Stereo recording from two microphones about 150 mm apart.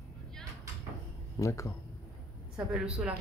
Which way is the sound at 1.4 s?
20° left (ahead or behind).